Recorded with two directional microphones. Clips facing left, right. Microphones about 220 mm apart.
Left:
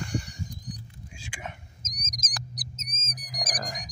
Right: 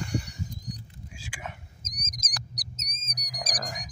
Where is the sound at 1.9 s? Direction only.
55° right (ahead or behind).